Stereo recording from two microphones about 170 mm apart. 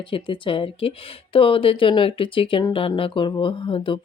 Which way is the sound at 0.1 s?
30° left (ahead or behind).